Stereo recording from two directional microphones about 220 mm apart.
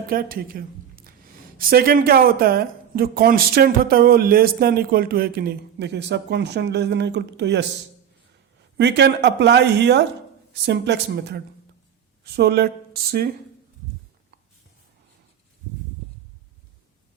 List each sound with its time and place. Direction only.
0.1 s a woman's voice: 40° right (ahead or behind)
8.8 s speech: 50° right (ahead or behind)